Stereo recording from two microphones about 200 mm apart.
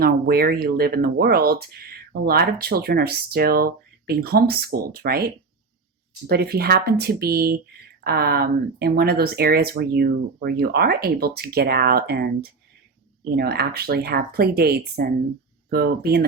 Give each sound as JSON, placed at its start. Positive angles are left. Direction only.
{"t": 0.0, "sound": "speech", "side_deg": -50}